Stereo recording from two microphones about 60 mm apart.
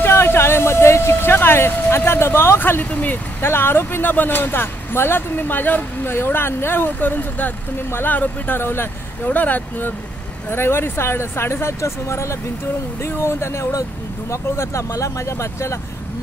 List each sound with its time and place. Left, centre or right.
0.0 s speech: left
2.8 s speech: left